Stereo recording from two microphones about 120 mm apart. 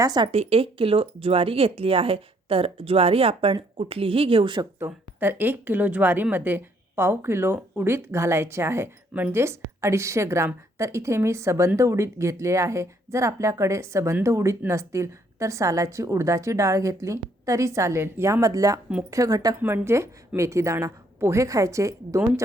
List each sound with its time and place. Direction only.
0.0 s speech: 35° right (ahead or behind)
0.3 s speech: 55° right (ahead or behind)
4.8 s a woman's voice: 15° right (ahead or behind)